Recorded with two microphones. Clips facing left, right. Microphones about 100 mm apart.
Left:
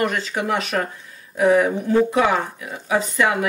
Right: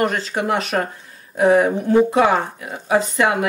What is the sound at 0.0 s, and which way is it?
Speech, 40° right (ahead or behind).